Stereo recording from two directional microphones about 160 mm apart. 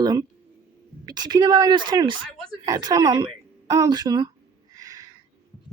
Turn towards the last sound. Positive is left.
turn(degrees=-20)  # may be behind; listen again after turning